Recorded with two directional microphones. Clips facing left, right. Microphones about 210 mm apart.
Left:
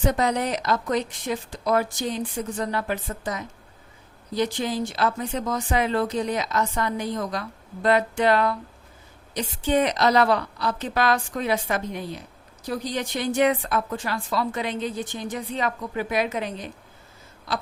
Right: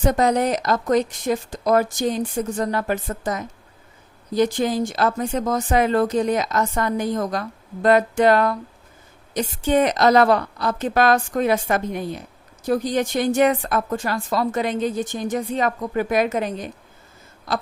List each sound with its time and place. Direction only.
0.0 s speech: 45° right (ahead or behind)